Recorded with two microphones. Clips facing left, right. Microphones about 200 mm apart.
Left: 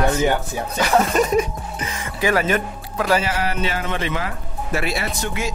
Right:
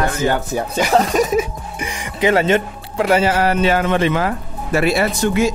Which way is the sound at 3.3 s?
55° right (ahead or behind).